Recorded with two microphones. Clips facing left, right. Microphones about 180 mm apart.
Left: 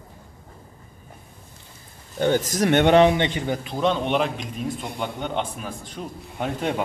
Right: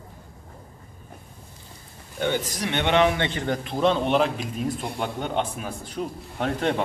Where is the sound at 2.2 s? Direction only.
40° left (ahead or behind).